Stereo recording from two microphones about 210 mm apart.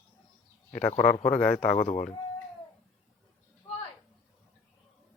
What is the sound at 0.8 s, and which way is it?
A man's voice, 35° left (ahead or behind).